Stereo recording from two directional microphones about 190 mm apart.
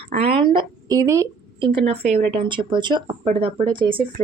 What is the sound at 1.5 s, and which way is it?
Speech, 25° right (ahead or behind).